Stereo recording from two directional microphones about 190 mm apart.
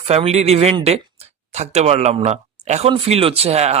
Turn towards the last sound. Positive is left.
turn(degrees=-35)  # may be behind; listen again after turning